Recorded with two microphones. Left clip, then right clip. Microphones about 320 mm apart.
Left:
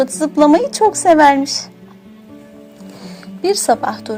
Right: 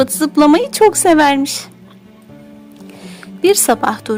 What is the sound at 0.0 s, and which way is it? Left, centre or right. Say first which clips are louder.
A woman's voice: right 1 dB; right.